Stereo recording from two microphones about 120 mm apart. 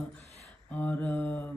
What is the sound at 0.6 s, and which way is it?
Speech, 15° left (ahead or behind).